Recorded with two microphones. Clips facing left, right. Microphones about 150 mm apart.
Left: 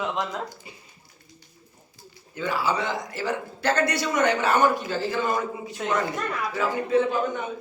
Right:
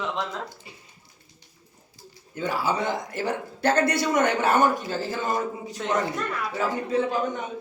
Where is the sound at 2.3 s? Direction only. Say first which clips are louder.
Even; 45° right (ahead or behind).